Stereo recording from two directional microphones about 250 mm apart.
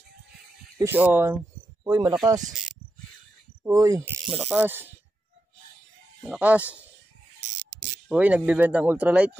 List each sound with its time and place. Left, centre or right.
0.7 s speech: centre
2.4 s cricket: centre
3.6 s speech: centre
6.2 s speech: centre
8.1 s speech: centre